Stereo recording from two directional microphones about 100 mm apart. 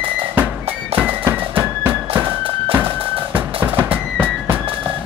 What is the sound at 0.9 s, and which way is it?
Music, 20° right (ahead or behind).